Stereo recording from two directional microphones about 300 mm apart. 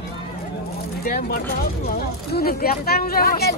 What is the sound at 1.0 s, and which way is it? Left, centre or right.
Speech, left.